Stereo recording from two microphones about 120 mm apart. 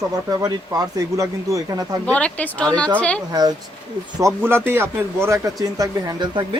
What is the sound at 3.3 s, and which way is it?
Speech, 30° right (ahead or behind).